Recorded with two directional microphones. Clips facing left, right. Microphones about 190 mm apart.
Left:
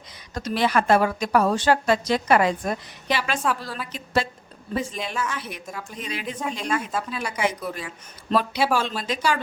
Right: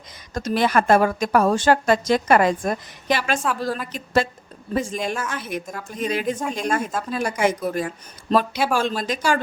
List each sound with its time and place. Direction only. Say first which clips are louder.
0.3 s a woman's voice: right 2 dB; 45° right (ahead or behind)